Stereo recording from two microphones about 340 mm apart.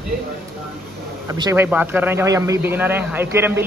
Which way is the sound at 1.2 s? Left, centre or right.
Centre.